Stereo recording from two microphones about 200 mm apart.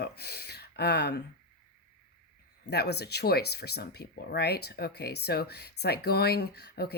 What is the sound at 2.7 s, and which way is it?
Speech, 55° left (ahead or behind).